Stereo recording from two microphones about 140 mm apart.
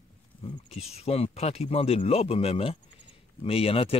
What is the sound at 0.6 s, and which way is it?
Speech, 45° left (ahead or behind).